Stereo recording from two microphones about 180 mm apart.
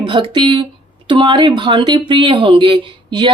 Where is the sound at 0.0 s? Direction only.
25° right (ahead or behind).